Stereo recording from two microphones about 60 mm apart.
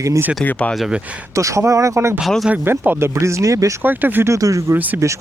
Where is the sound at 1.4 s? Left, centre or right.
Right.